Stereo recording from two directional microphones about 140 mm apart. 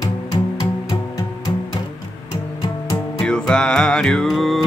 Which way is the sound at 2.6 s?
30° left (ahead or behind).